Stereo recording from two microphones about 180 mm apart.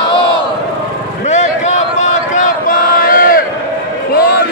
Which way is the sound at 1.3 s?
40° left (ahead or behind).